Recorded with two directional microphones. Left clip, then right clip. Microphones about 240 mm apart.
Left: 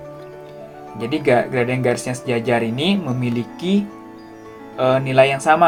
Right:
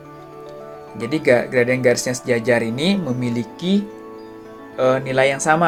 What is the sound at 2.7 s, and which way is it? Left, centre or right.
Speech, centre.